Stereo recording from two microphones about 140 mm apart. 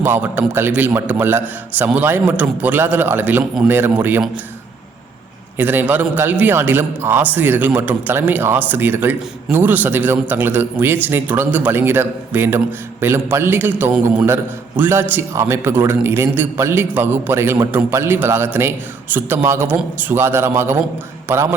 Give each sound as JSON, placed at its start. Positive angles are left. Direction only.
{"t": 0.0, "sound": "a man's voice", "side_deg": -15}
{"t": 5.5, "sound": "a man's voice", "side_deg": -15}